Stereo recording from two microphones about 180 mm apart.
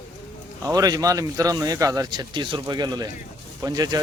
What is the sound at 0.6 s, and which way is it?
A man's voice, 20° right (ahead or behind).